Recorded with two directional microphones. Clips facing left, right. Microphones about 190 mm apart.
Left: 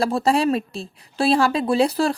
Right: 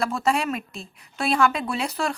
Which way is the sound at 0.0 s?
35° left (ahead or behind).